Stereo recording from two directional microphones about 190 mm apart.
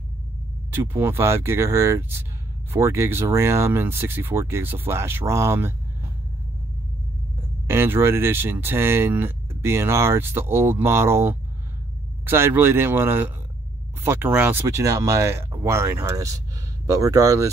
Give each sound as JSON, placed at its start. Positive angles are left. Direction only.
{"t": 0.7, "sound": "speech", "side_deg": -10}
{"t": 7.6, "sound": "speech", "side_deg": -10}